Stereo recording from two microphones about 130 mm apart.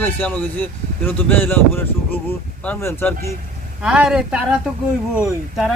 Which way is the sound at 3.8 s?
5° right (ahead or behind).